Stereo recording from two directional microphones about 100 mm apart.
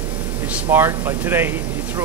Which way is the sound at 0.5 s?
20° right (ahead or behind).